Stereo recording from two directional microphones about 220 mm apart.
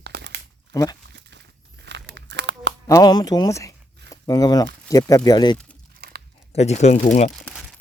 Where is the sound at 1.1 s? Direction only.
50° right (ahead or behind).